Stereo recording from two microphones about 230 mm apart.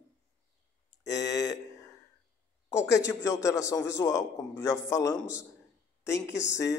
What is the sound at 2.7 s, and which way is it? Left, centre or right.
A man's voice, centre.